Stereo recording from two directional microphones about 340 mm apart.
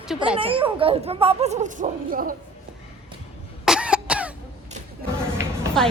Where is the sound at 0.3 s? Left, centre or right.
Centre.